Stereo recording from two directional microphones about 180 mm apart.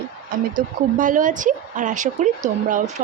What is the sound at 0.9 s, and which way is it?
A woman's voice, 45° right (ahead or behind).